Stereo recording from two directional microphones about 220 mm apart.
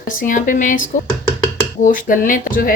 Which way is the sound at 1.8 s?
35° left (ahead or behind).